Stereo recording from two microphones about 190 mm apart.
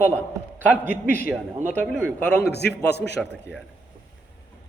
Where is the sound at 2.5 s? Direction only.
60° left (ahead or behind).